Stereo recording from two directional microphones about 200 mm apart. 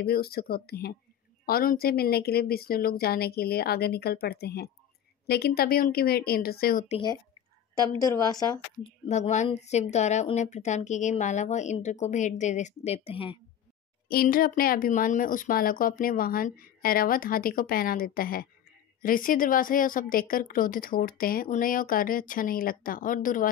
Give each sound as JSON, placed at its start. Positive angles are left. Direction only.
{"t": 0.0, "sound": "a woman's voice", "side_deg": 50}
{"t": 8.0, "sound": "speech", "side_deg": 20}
{"t": 9.1, "sound": "speech", "side_deg": 35}
{"t": 14.0, "sound": "a woman's voice", "side_deg": 50}